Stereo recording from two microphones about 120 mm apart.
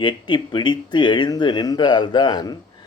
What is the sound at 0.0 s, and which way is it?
Speech, 40° left (ahead or behind).